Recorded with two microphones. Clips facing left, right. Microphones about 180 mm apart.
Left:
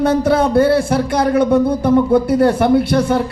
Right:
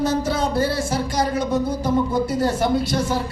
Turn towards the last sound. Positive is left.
turn(degrees=60)  # may be behind; listen again after turning